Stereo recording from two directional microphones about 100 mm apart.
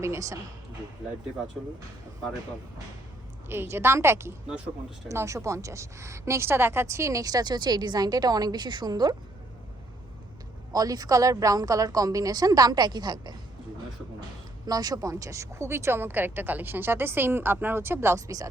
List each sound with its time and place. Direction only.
0.0 s speech: 30° right (ahead or behind)
3.5 s a woman's voice: 25° right (ahead or behind); by 9.1 s 45° right (ahead or behind)
10.7 s a woman's voice: 40° right (ahead or behind)
14.7 s speech: 40° right (ahead or behind)